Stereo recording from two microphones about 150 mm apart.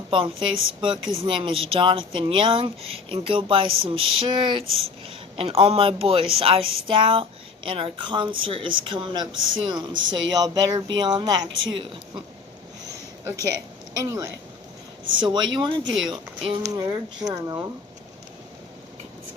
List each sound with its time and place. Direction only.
0.1 s speech: 35° right (ahead or behind)
14.0 s speech: 25° right (ahead or behind)
16.6 s speech: 20° right (ahead or behind)